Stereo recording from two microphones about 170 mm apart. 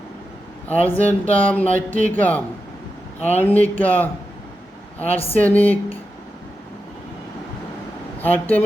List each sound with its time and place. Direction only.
0.7 s speech: 10° left (ahead or behind)
5.1 s speech: 35° left (ahead or behind)
5.4 s speech: 10° left (ahead or behind)
8.2 s speech: 10° left (ahead or behind)